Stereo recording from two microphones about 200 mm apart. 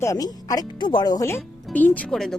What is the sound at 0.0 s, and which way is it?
A woman's voice, 15° left (ahead or behind).